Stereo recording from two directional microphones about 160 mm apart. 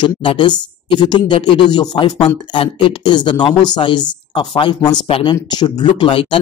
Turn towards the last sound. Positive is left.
turn(degrees=30)  # may be behind; listen again after turning